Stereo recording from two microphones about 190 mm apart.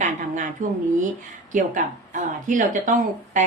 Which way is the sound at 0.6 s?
45° right (ahead or behind).